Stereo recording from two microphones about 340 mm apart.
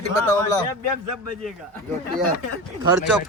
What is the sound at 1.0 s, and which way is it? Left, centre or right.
Speech, right.